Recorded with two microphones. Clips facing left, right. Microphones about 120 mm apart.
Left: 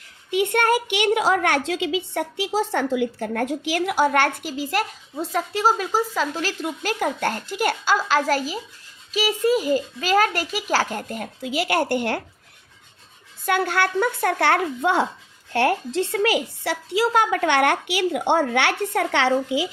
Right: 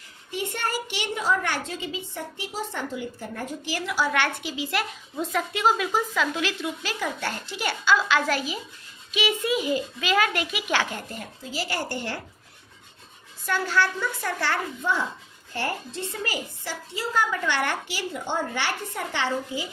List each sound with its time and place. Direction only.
0.3 s a woman's voice: 65° left (ahead or behind); by 3.6 s 85° left
3.7 s a child's voice: 55° left (ahead or behind)
13.4 s speech: 60° left (ahead or behind)
15.5 s a woman's voice: 80° left